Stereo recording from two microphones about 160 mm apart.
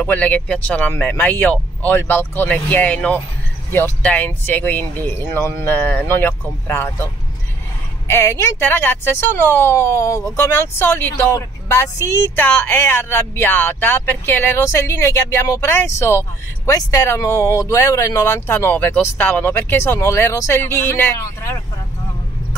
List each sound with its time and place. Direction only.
0.0 s speech: 10° left (ahead or behind)
8.1 s speech: 15° left (ahead or behind)